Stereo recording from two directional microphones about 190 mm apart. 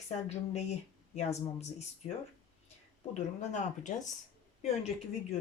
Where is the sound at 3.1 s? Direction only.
40° left (ahead or behind).